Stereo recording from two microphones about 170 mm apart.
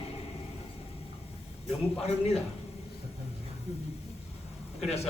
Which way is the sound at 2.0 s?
35° left (ahead or behind).